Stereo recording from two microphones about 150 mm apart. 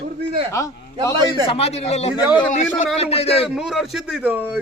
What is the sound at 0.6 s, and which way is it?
Speech, 20° left (ahead or behind).